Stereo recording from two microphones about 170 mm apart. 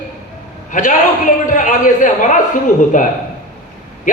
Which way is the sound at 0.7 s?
50° left (ahead or behind).